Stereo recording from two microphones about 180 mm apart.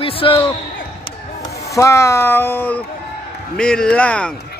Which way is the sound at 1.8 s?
15° left (ahead or behind).